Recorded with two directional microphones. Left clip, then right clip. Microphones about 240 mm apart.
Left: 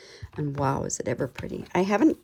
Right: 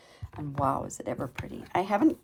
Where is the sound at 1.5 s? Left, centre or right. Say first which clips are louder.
Left 2 dB; left.